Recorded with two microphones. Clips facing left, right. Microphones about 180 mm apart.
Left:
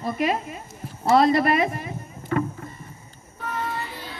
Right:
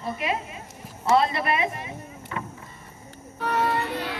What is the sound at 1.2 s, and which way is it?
Speech, 40° left (ahead or behind).